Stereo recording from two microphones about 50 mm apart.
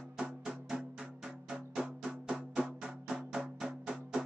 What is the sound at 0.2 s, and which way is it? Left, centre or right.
Music, centre.